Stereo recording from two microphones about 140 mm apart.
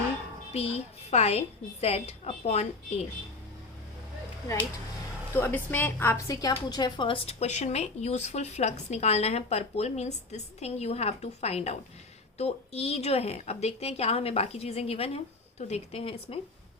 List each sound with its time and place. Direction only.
0.5 s speech: 45° left (ahead or behind)
5.3 s a woman's voice: 15° left (ahead or behind); by 7.2 s 35° left (ahead or behind)
7.3 s speech: 50° left (ahead or behind)